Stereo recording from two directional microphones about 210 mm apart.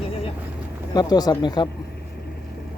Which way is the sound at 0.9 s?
20° left (ahead or behind).